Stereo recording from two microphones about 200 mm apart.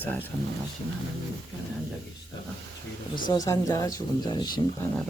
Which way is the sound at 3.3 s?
15° left (ahead or behind).